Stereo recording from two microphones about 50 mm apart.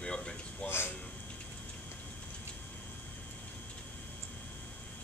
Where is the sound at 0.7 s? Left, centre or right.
Left.